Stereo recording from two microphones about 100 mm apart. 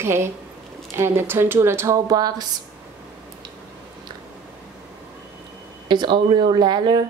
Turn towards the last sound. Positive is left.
turn(degrees=-50)  # may be behind; listen again after turning